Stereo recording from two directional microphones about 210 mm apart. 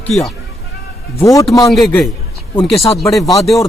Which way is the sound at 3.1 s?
Centre (ahead or behind).